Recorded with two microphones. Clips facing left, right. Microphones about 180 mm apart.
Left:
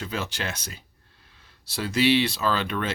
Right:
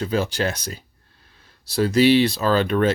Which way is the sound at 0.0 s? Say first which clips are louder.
Right 9 dB; 35° right (ahead or behind).